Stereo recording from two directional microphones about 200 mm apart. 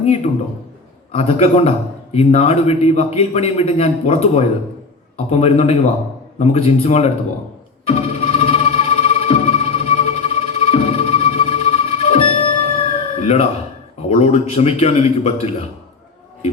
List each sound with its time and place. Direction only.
1.1 s a man's voice: 30° left (ahead or behind)
7.9 s music: 30° left (ahead or behind)
14.1 s a man's voice: 30° left (ahead or behind)